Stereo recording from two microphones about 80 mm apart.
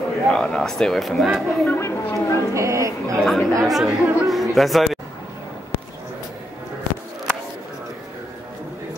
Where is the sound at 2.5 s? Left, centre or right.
Right.